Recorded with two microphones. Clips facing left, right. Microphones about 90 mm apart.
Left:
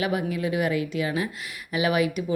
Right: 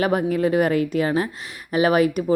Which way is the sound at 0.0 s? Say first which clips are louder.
Right 6 dB; 45° right (ahead or behind).